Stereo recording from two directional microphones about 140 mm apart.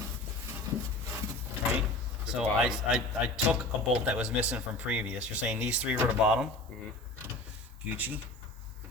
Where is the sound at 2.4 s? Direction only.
5° right (ahead or behind).